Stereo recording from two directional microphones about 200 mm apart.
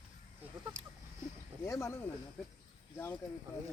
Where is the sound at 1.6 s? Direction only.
15° left (ahead or behind).